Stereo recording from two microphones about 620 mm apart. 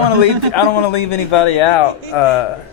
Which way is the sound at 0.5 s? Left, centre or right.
Left.